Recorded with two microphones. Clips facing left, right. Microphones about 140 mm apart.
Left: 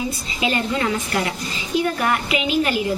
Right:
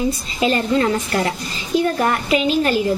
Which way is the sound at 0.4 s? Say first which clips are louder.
Right 4 dB; 35° right (ahead or behind).